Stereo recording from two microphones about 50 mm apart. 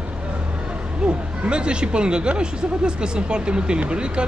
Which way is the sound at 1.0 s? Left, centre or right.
Right.